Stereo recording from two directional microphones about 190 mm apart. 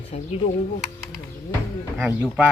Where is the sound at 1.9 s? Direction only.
10° right (ahead or behind).